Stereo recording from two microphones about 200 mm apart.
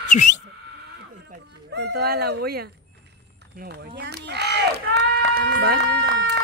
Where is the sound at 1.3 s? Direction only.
60° right (ahead or behind).